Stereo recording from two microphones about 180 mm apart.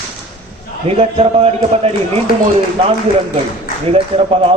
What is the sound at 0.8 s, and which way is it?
A man's voice, 35° right (ahead or behind).